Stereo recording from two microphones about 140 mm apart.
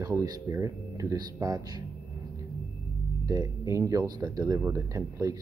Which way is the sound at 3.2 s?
25° right (ahead or behind).